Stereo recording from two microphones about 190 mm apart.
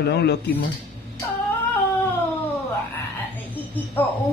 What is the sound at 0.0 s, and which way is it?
Mantra, 60° left (ahead or behind).